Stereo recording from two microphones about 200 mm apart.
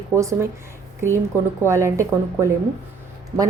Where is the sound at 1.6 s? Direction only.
15° right (ahead or behind).